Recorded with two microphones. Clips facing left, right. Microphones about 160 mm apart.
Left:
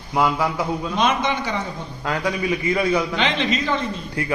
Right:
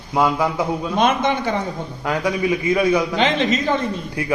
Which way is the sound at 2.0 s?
15° right (ahead or behind).